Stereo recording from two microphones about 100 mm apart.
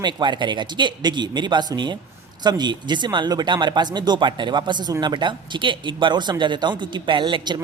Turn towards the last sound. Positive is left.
turn(degrees=-55)  # may be behind; listen again after turning